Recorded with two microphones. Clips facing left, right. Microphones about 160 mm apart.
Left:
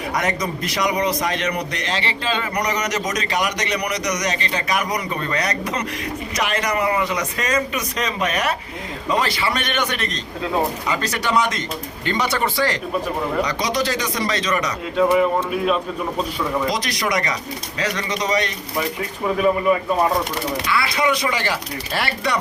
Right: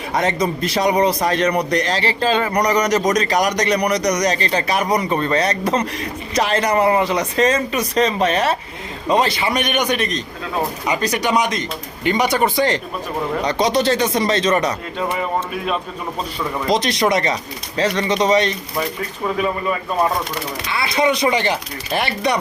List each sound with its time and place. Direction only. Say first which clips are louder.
0.1 s a man's voice: right 5 dB; 25° right (ahead or behind)
12.4 s speech: right 4 dB; 25° right (ahead or behind)
16.6 s speech: right 6 dB; 25° right (ahead or behind)
20.7 s speech: right 3 dB; 25° right (ahead or behind)